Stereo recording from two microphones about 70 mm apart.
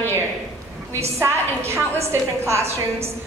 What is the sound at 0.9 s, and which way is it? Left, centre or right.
A woman's voice, right.